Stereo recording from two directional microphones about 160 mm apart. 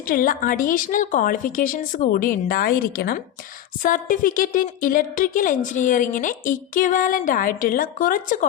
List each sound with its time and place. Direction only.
0.0 s a woman's voice: 60° left (ahead or behind)
3.8 s a woman's voice: 55° left (ahead or behind)